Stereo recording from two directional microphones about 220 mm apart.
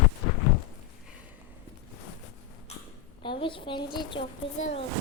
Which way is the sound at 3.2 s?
20° left (ahead or behind).